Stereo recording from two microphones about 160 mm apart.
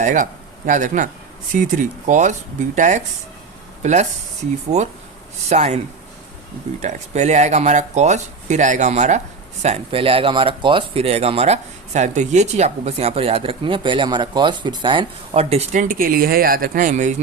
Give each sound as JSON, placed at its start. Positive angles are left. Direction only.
{"t": 0.0, "sound": "speech", "side_deg": -50}
{"t": 6.8, "sound": "speech", "side_deg": -45}